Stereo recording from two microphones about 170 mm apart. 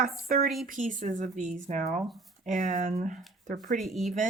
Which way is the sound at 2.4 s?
45° right (ahead or behind).